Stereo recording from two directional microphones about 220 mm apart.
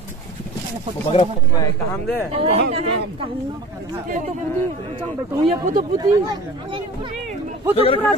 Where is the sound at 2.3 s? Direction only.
30° right (ahead or behind).